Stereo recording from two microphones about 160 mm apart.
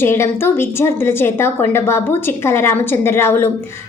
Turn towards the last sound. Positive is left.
turn(degrees=15)  # may be behind; listen again after turning